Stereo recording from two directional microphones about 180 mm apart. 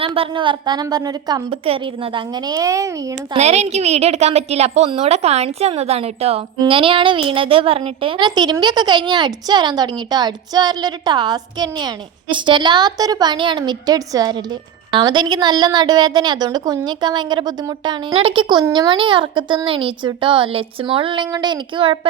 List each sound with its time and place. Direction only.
0.0 s a woman's voice: 30° right (ahead or behind)
3.3 s a woman's voice: 40° right (ahead or behind)